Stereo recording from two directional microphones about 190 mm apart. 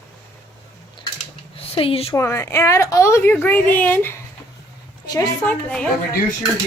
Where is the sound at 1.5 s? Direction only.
30° left (ahead or behind).